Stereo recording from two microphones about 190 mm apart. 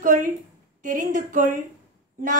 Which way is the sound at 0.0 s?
40° right (ahead or behind).